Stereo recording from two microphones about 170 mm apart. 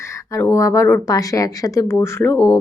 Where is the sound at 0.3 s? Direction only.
15° left (ahead or behind).